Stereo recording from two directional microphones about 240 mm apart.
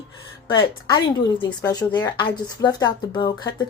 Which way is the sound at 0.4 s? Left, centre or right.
Centre.